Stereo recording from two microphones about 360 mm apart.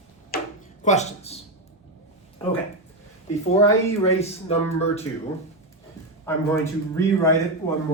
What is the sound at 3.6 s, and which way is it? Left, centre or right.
Speech, centre.